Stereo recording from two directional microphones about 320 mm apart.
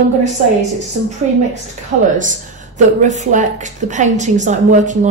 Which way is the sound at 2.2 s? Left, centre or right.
Right.